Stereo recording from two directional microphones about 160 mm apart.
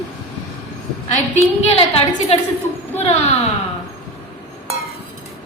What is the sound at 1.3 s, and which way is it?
A woman's voice, 40° left (ahead or behind).